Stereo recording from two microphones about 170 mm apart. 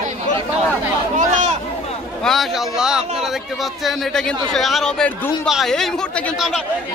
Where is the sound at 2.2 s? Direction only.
Centre (ahead or behind).